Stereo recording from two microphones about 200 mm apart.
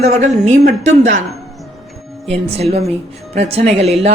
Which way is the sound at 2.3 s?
30° right (ahead or behind).